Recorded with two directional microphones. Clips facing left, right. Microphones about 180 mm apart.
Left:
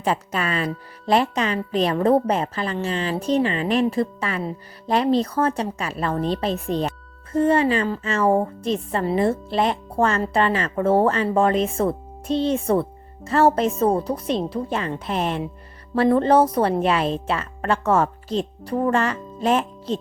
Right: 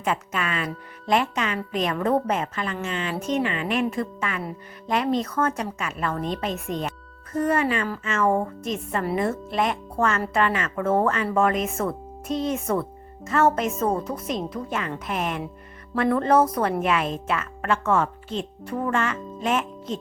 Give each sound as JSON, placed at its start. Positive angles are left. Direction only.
{"t": 0.0, "sound": "a woman's voice", "side_deg": 35}